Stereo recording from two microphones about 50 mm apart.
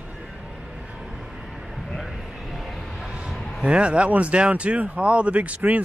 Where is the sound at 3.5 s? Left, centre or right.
Right.